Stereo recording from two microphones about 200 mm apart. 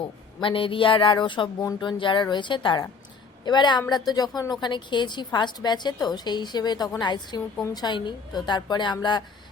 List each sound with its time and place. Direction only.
0.3 s a woman's voice: 25° left (ahead or behind)